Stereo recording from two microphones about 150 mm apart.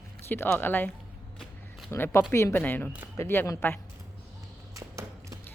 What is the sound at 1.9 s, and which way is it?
Speech, 15° left (ahead or behind).